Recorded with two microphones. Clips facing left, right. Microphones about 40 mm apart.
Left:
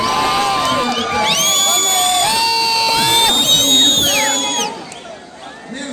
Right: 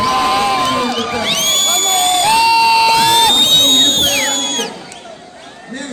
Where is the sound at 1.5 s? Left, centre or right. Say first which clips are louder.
Right 1 dB; right.